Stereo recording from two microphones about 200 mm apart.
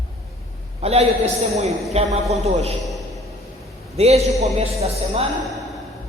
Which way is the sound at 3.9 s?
30° right (ahead or behind).